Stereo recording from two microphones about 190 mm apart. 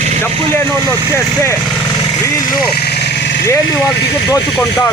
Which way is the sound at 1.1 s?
15° left (ahead or behind).